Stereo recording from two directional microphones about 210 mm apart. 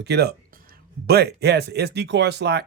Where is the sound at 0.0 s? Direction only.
50° right (ahead or behind).